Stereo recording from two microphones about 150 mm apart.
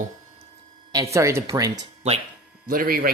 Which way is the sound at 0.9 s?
20° right (ahead or behind).